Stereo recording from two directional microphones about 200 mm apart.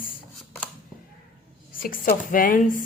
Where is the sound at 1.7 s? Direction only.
45° left (ahead or behind).